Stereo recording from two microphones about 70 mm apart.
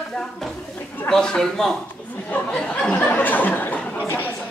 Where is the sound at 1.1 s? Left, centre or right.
Centre.